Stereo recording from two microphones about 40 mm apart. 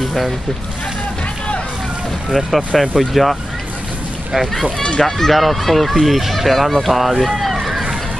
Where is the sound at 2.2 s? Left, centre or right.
Centre.